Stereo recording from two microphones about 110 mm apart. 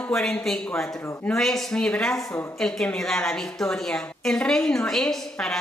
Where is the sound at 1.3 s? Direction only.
5° left (ahead or behind).